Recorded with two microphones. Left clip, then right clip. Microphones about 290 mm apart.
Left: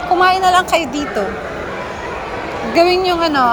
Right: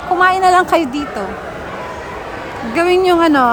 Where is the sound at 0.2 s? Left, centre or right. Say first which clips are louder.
Right 2 dB; centre.